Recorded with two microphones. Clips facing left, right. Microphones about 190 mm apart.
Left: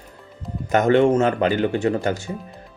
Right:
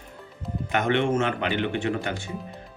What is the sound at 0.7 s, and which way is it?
Speech, 40° left (ahead or behind).